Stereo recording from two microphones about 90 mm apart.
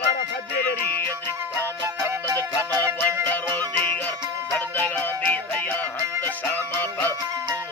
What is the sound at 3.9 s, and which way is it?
Music, 20° left (ahead or behind).